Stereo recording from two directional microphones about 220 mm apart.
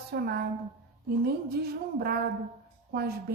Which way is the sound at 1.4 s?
45° right (ahead or behind).